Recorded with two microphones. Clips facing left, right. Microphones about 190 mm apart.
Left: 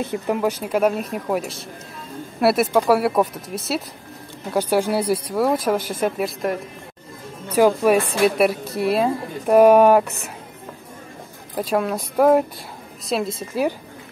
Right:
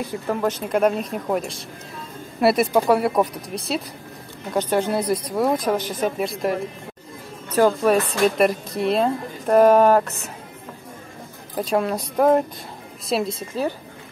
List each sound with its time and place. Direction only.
0.0 s speech: 20° left (ahead or behind)
0.4 s a woman's voice: 10° left (ahead or behind)
11.5 s speech: centre (ahead or behind)